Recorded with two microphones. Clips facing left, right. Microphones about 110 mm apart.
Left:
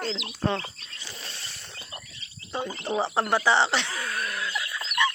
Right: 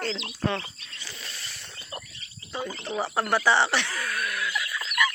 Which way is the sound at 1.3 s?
30° left (ahead or behind).